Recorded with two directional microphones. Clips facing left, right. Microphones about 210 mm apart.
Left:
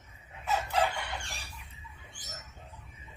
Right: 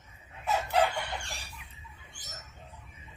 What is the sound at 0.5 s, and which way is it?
Chicken, 70° right (ahead or behind).